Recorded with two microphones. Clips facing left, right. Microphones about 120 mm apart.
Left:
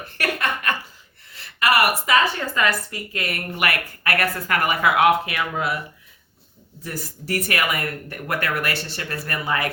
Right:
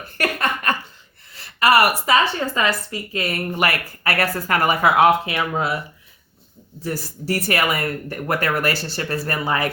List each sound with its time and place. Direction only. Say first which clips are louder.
0.2 s a sound: right 2 dB; 40° right (ahead or behind)
1.3 s a woman's voice: right 4 dB; 35° right (ahead or behind)
6.8 s speech: right 5 dB; 30° right (ahead or behind)